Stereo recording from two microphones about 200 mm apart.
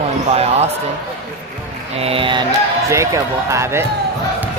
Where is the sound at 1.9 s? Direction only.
30° right (ahead or behind); by 3.8 s 15° right (ahead or behind).